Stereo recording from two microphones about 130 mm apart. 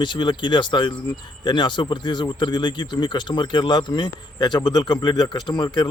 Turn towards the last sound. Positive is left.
turn(degrees=35)  # may be behind; listen again after turning